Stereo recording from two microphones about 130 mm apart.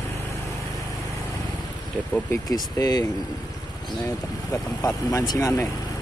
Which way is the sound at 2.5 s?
30° left (ahead or behind).